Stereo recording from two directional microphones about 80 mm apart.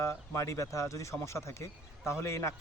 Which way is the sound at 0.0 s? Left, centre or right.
Left.